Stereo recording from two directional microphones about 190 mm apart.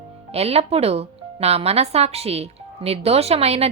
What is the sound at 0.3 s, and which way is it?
Speech, 30° right (ahead or behind).